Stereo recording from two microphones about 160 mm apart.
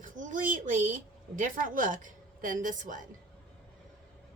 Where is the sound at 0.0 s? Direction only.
55° right (ahead or behind).